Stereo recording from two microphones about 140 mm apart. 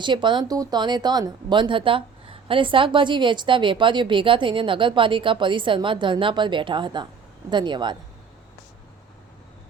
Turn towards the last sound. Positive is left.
turn(degrees=-35)  # may be behind; listen again after turning